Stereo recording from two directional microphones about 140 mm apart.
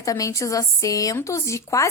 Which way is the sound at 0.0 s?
25° left (ahead or behind).